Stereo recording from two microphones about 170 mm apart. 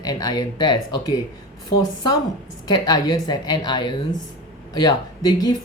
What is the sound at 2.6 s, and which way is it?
Speech, 25° left (ahead or behind).